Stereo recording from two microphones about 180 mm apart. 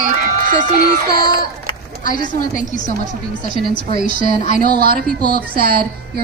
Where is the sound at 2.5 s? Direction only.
45° left (ahead or behind).